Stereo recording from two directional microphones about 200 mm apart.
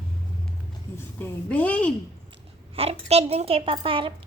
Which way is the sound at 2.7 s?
30° right (ahead or behind).